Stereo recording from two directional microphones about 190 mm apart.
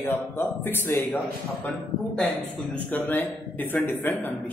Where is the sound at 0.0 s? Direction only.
10° left (ahead or behind).